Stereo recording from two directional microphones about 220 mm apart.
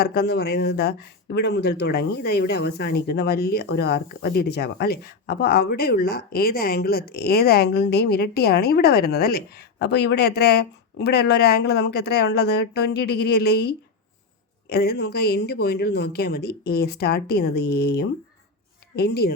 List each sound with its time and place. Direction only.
0.0 s speech: 45° left (ahead or behind)